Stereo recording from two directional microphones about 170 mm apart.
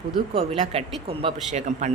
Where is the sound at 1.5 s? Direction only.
45° right (ahead or behind).